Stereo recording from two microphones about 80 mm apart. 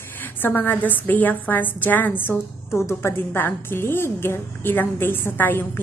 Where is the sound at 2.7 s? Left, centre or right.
Left.